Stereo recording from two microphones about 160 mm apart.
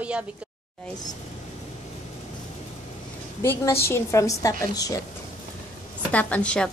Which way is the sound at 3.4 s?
15° left (ahead or behind).